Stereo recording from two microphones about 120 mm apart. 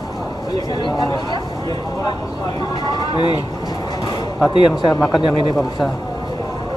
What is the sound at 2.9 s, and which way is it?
Speech, 40° left (ahead or behind).